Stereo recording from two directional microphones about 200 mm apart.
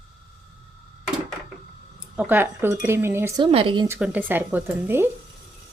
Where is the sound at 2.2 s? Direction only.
10° right (ahead or behind).